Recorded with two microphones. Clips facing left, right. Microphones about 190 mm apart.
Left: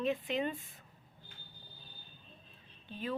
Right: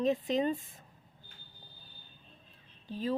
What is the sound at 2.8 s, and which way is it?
Speech, 40° right (ahead or behind).